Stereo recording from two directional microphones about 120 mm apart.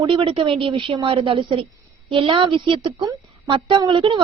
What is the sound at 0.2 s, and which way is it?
A woman's voice, 45° right (ahead or behind).